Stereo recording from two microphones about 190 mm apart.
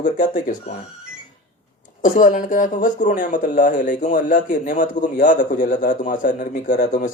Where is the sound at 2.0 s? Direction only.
45° left (ahead or behind).